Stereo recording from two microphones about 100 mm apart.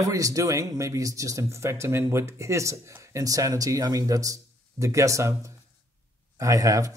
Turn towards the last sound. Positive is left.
turn(degrees=-35)  # may be behind; listen again after turning